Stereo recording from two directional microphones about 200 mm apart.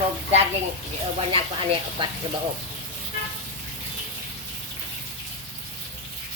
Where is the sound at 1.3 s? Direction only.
25° right (ahead or behind).